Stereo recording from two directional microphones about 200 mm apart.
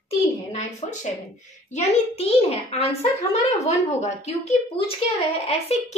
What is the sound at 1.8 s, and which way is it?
A child's voice, 30° left (ahead or behind).